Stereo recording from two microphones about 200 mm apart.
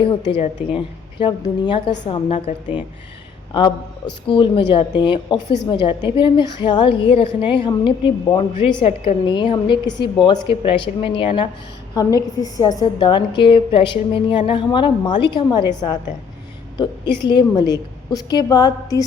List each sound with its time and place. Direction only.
0.1 s a woman's voice: 25° left (ahead or behind)
4.3 s a woman's voice: 25° left (ahead or behind)